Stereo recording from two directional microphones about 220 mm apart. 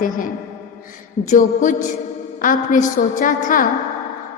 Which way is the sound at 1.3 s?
35° left (ahead or behind).